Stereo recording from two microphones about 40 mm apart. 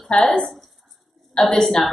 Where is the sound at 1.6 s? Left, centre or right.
Centre.